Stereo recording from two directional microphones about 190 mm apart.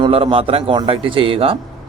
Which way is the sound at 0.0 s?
30° right (ahead or behind).